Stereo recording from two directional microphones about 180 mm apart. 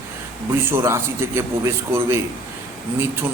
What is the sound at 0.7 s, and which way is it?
A man's voice, 15° right (ahead or behind).